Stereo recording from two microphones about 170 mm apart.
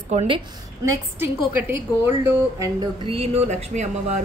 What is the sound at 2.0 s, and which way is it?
Speech, 15° right (ahead or behind).